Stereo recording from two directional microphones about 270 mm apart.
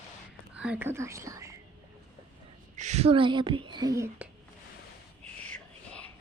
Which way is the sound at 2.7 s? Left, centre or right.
Right.